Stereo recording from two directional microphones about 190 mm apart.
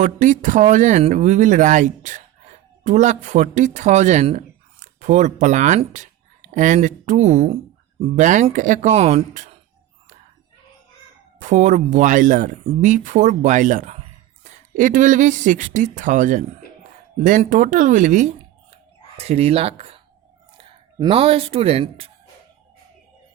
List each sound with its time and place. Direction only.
0.0 s speech: 40° right (ahead or behind)
11.3 s speech: 40° right (ahead or behind)
21.0 s speech: 30° right (ahead or behind)